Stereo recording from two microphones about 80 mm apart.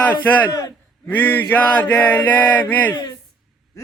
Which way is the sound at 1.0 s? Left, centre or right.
Left.